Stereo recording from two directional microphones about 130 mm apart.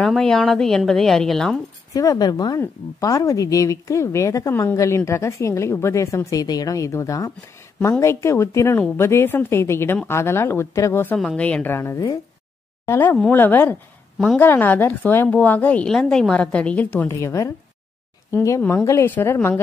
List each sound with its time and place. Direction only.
0.0 s a woman's voice: 5° left (ahead or behind)
2.0 s speech: 30° left (ahead or behind)
11.1 s a woman's voice: 5° left (ahead or behind); by 18.6 s 25° left (ahead or behind)
18.6 s a woman's voice: 10° left (ahead or behind)